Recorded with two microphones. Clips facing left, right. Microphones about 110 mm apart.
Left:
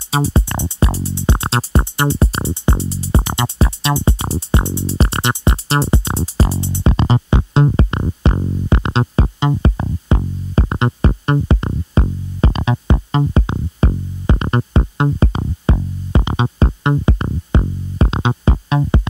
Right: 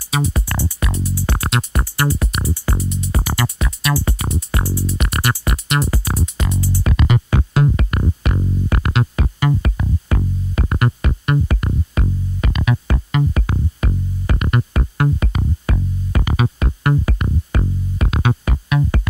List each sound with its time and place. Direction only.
0.1 s music: 30° left (ahead or behind)